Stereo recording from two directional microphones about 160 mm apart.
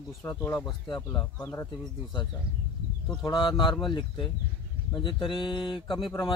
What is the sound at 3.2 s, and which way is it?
Speech, 30° left (ahead or behind).